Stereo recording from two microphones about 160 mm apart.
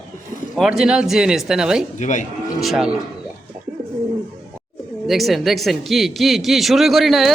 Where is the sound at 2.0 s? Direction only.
50° left (ahead or behind).